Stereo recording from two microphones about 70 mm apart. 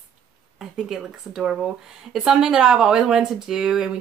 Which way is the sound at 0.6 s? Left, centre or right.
Centre.